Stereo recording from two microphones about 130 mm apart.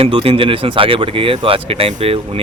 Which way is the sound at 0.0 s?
45° right (ahead or behind).